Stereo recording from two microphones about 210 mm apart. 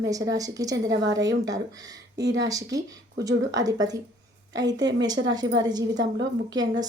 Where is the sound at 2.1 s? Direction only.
60° right (ahead or behind).